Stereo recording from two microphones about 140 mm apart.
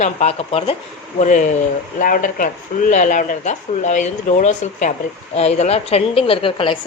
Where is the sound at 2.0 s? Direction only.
75° left (ahead or behind).